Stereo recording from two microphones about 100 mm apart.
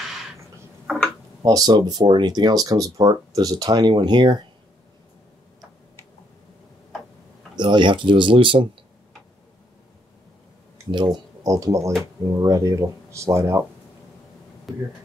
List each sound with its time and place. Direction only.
1.4 s speech: 40° right (ahead or behind)
7.5 s speech: 50° right (ahead or behind)
10.9 s speech: 50° right (ahead or behind)
11.4 s speech: 35° right (ahead or behind)
14.7 s speech: centre (ahead or behind)